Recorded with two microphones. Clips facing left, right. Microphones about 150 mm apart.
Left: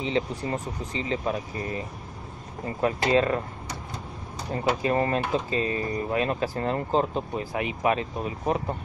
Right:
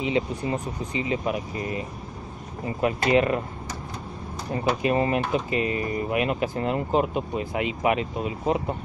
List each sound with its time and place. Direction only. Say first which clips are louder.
0.0 s speech: right 2 dB; 15° right (ahead or behind)
4.8 s speech: right 3 dB; 20° right (ahead or behind)